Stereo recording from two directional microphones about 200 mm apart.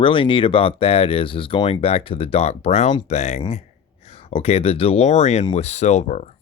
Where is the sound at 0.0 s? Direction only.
25° left (ahead or behind).